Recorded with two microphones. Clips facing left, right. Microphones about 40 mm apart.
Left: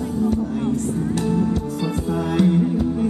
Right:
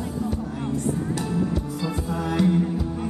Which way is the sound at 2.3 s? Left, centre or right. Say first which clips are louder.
Left 3 dB; centre.